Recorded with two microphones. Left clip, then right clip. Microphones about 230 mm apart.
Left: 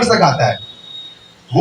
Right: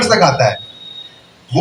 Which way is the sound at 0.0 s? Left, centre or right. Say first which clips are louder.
Right 1 dB; right.